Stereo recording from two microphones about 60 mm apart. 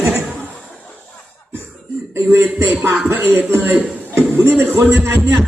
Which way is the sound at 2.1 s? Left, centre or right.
Right.